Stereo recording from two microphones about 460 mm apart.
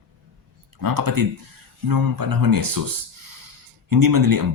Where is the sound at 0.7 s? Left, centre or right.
Right.